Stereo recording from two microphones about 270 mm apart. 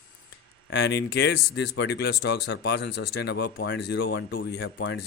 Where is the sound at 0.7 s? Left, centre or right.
Left.